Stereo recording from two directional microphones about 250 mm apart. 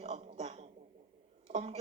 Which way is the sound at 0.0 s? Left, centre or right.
Right.